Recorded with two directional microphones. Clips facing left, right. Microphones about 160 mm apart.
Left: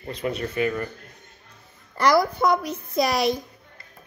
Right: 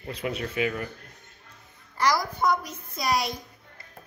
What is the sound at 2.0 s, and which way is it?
A child's voice, 60° left (ahead or behind).